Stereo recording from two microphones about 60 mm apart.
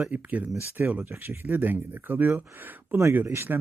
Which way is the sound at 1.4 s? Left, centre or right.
Right.